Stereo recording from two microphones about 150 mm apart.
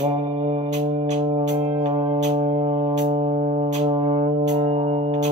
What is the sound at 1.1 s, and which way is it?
Organ, 50° right (ahead or behind).